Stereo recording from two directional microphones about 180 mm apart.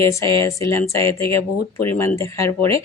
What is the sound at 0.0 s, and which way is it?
Speech, 15° left (ahead or behind).